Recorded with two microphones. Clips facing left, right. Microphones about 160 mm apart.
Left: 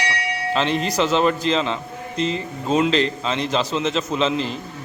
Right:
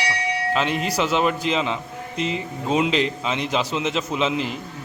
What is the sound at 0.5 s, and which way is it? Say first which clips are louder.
A man's voice: left 3 dB; 5° right (ahead or behind).